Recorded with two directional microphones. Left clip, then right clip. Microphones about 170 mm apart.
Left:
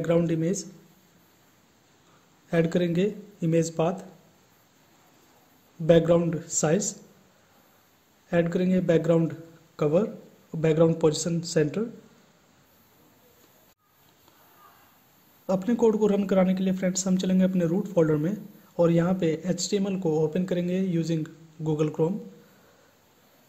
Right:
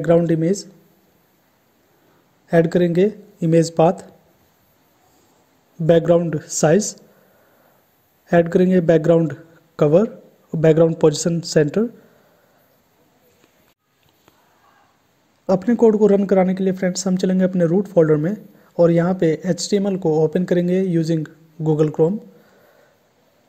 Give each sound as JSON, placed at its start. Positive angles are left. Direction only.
{"t": 0.3, "sound": "speech", "side_deg": -30}
{"t": 2.4, "sound": "speech", "side_deg": -30}
{"t": 5.9, "sound": "speech", "side_deg": -40}
{"t": 8.3, "sound": "a man's voice", "side_deg": -40}
{"t": 15.4, "sound": "speech", "side_deg": -30}